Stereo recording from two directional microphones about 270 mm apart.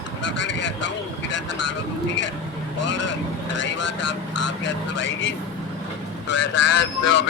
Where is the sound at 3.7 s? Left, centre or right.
Left.